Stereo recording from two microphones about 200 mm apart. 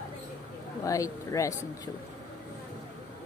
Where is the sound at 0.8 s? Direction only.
15° left (ahead or behind).